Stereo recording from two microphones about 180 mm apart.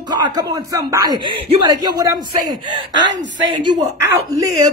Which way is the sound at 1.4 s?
30° right (ahead or behind).